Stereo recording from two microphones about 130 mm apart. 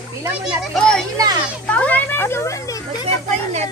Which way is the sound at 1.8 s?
10° left (ahead or behind).